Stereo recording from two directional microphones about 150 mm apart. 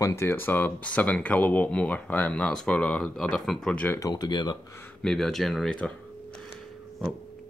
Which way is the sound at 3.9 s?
25° left (ahead or behind).